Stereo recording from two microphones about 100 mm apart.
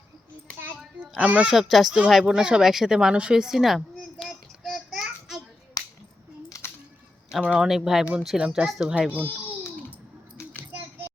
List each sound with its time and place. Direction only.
1.2 s speech: 15° right (ahead or behind)
1.5 s speech: centre (ahead or behind)
5.8 s finger snapping: 40° left (ahead or behind)
7.3 s speech: 10° right (ahead or behind)